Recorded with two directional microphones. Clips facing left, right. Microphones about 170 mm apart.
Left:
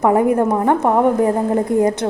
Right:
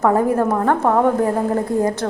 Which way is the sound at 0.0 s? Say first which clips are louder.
Left 2 dB; 15° left (ahead or behind).